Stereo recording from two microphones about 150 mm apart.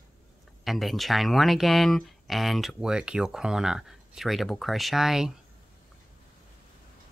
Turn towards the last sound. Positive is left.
turn(degrees=0)  # may be behind; listen again after turning